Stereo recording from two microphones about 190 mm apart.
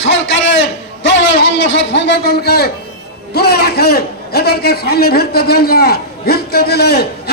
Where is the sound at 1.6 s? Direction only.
75° left (ahead or behind); by 7.0 s 55° left (ahead or behind).